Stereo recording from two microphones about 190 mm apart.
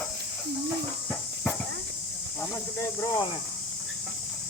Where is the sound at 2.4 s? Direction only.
15° left (ahead or behind).